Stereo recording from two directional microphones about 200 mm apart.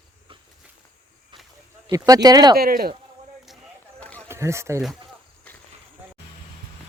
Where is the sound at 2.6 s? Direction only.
50° right (ahead or behind).